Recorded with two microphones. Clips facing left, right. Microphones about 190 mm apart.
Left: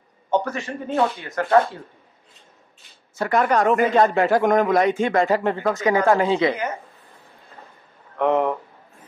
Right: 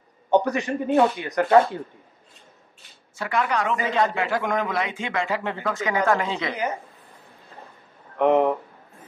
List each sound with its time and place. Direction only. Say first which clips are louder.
0.3 s speech: right 3 dB; 15° right (ahead or behind)
3.2 s a man's voice: left 5 dB; 45° left (ahead or behind)
8.2 s speech: right 1 dB; 15° right (ahead or behind)